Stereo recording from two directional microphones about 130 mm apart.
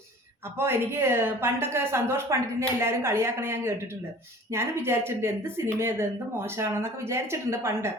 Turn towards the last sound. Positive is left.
turn(degrees=-20)  # may be behind; listen again after turning